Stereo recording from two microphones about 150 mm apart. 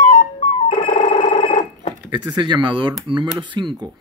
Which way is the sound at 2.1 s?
30° right (ahead or behind).